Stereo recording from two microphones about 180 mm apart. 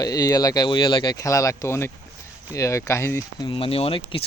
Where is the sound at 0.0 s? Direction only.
20° left (ahead or behind).